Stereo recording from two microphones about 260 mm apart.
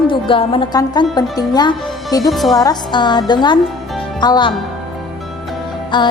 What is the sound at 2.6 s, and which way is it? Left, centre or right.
A woman's voice, centre.